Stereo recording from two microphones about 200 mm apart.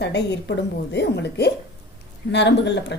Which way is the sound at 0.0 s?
60° left (ahead or behind).